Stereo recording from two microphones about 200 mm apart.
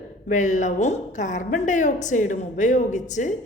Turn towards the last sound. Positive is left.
turn(degrees=40)  # may be behind; listen again after turning